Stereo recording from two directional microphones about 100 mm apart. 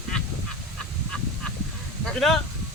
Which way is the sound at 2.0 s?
5° left (ahead or behind).